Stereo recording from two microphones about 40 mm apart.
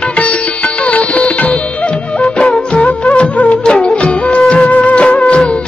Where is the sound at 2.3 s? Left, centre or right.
Left.